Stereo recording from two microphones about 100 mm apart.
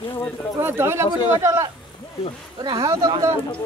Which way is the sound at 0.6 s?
25° right (ahead or behind).